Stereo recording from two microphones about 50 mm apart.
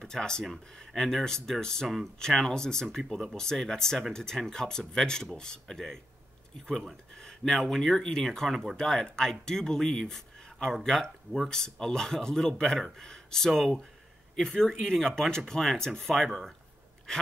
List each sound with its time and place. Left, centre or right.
0.0 s speech: centre
7.2 s speech: centre